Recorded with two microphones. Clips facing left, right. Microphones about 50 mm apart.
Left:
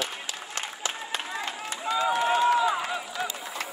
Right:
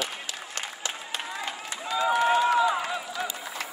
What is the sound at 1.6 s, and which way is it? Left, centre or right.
Run, left.